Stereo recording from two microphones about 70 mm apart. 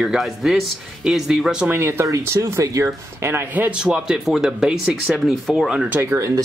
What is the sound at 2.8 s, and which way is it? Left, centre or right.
Speech, right.